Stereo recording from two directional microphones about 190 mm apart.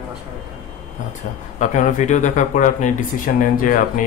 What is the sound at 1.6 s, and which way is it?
Speech, 40° left (ahead or behind).